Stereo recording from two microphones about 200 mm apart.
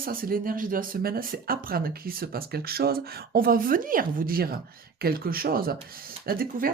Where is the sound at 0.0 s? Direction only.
45° right (ahead or behind).